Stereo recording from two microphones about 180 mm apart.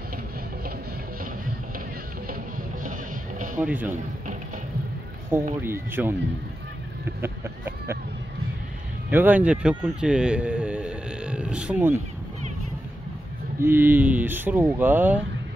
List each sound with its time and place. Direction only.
2.8 s music: 45° right (ahead or behind)
3.6 s speech: 10° right (ahead or behind)
5.6 s speech: 10° right (ahead or behind)
7.2 s speech: 10° right (ahead or behind)
9.1 s a man's voice: 10° right (ahead or behind)
13.6 s speech: 10° right (ahead or behind)